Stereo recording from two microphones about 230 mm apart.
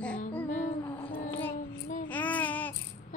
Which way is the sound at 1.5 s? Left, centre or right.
Left.